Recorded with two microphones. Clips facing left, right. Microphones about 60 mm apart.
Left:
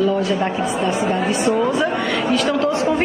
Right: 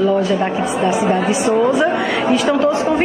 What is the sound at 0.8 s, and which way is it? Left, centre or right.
Speech, centre.